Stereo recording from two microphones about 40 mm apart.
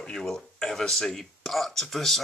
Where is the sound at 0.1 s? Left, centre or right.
Centre.